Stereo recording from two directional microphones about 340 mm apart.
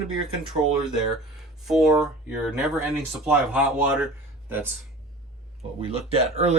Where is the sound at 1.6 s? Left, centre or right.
Centre.